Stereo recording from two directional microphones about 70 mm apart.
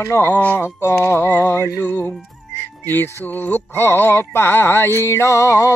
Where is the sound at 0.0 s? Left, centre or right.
Left.